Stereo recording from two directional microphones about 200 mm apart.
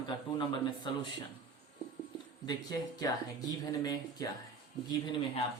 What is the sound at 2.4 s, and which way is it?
Speech, 20° left (ahead or behind).